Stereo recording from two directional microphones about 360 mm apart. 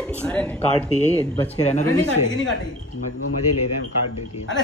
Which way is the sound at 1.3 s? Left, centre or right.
Centre.